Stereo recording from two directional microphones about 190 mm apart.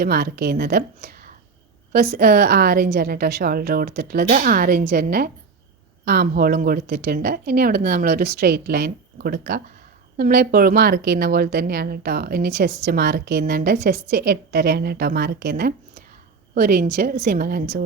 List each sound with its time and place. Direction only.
0.0 s a woman's voice: 55° right (ahead or behind)